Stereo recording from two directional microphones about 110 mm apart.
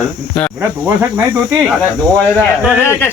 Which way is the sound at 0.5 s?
20° right (ahead or behind).